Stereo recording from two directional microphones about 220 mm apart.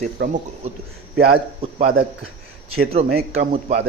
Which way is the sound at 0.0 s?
35° right (ahead or behind).